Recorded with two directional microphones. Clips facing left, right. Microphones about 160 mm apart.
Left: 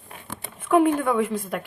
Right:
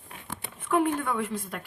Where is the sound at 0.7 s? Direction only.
90° left.